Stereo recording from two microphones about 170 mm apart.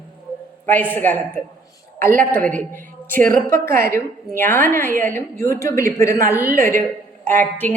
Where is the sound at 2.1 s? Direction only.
55° right (ahead or behind).